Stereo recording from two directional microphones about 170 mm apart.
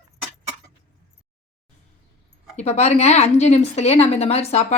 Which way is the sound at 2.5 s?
40° left (ahead or behind).